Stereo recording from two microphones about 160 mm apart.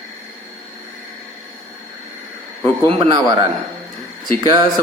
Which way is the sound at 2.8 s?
30° right (ahead or behind).